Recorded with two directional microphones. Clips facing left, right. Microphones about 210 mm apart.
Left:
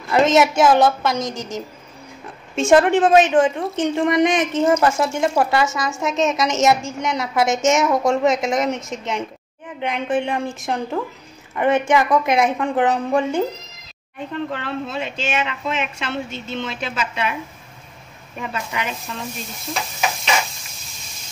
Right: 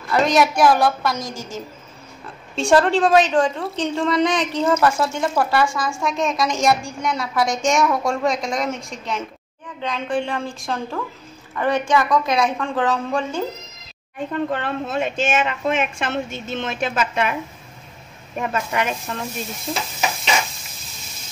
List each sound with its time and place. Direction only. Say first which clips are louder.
0.1 s a woman's voice: left 2 dB; 20° left (ahead or behind)
14.5 s speech: right 2 dB; 50° right (ahead or behind)
18.5 s speech: right 4 dB; 50° right (ahead or behind)